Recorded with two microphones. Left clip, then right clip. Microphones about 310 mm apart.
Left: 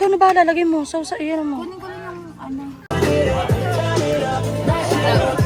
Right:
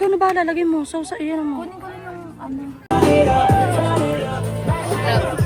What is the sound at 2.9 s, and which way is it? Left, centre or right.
Music, right.